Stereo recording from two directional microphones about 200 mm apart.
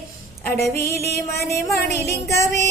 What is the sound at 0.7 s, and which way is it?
Music, 15° left (ahead or behind).